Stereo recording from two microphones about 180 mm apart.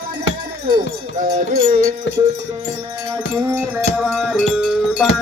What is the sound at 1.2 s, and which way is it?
Music, 50° right (ahead or behind).